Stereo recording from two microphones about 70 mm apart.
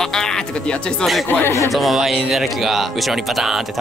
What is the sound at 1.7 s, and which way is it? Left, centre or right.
Speech, centre.